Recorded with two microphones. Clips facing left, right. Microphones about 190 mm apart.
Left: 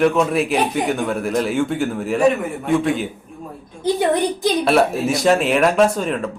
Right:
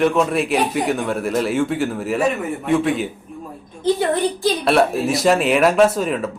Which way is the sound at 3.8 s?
15° left (ahead or behind).